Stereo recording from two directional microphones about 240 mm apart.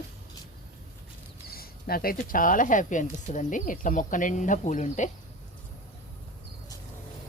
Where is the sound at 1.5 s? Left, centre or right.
Left.